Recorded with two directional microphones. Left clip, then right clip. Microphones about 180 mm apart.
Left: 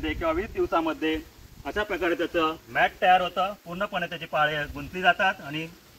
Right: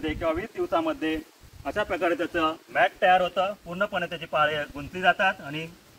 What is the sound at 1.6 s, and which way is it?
Speech, 35° right (ahead or behind).